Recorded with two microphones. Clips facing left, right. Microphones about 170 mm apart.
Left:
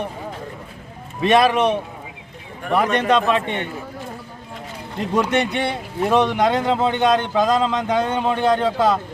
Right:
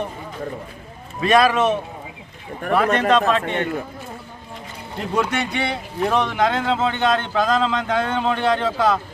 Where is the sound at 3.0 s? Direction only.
15° left (ahead or behind).